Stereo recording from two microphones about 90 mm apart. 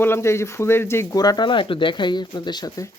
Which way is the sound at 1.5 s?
70° left (ahead or behind).